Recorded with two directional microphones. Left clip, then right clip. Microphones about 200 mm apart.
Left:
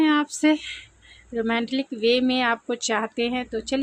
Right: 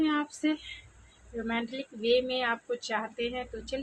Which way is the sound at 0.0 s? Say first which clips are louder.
Left 9 dB; 55° left (ahead or behind).